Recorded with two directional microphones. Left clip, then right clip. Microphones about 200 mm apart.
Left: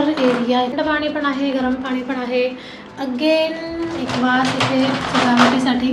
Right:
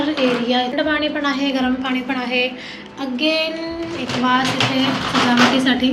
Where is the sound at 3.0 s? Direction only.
15° left (ahead or behind).